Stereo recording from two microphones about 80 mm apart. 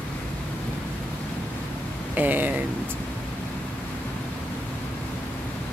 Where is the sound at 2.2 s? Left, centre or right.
Right.